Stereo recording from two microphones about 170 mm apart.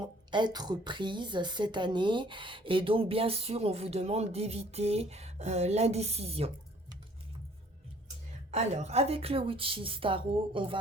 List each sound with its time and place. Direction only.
0.0 s a woman's voice: 25° right (ahead or behind)
8.4 s a woman's voice: 40° right (ahead or behind)